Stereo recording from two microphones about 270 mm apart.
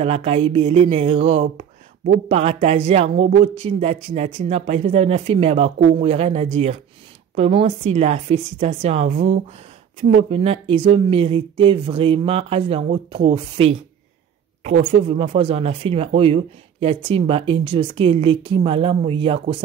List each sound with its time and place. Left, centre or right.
0.0 s speech: right
14.9 s speech: centre